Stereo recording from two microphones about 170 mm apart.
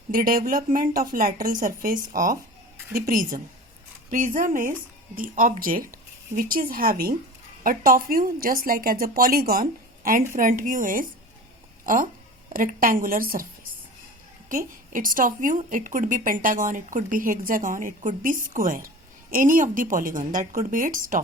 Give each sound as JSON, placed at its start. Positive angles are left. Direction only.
{"t": 0.1, "sound": "a woman's voice", "side_deg": -55}
{"t": 14.5, "sound": "a woman's voice", "side_deg": -50}